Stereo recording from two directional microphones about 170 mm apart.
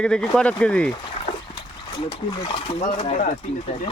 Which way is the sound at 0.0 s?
5° left (ahead or behind).